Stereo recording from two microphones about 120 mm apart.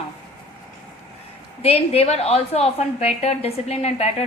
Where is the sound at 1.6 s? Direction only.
55° left (ahead or behind).